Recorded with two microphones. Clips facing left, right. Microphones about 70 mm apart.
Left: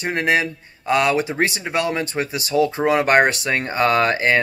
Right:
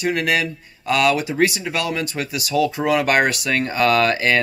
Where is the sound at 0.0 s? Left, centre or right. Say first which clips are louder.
Left 1 dB; left.